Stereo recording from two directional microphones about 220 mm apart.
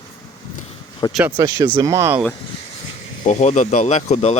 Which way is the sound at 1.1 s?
5° right (ahead or behind).